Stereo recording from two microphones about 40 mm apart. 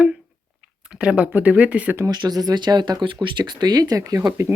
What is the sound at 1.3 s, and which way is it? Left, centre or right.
Speech, right.